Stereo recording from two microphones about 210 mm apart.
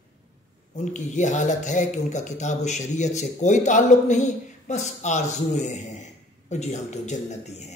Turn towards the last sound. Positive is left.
turn(degrees=35)  # may be behind; listen again after turning